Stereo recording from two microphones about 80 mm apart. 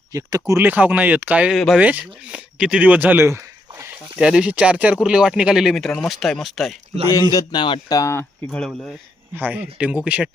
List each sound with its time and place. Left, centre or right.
0.1 s speech: right
0.5 s speech: right
1.5 s speech: centre
1.8 s speech: centre
3.2 s a sound: right
4.2 s speech: centre
7.1 s a man's voice: left
7.9 s speech: left
8.4 s speech: centre
9.3 s speech: right